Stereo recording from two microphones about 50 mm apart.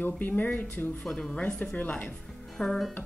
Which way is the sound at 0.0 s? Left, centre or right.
Left.